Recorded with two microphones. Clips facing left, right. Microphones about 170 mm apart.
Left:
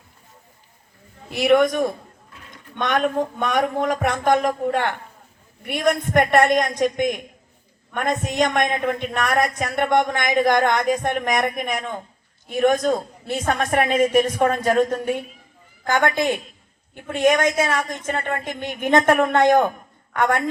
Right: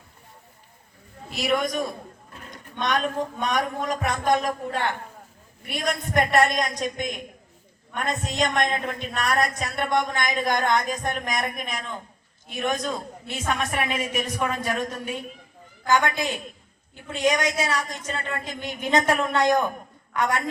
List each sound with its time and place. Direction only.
1.3 s a woman's voice: 55° left (ahead or behind)